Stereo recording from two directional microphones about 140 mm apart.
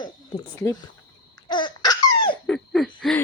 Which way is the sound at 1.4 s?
35° left (ahead or behind).